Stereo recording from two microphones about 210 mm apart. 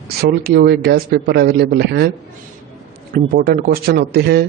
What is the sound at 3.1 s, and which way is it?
Speech, 45° right (ahead or behind).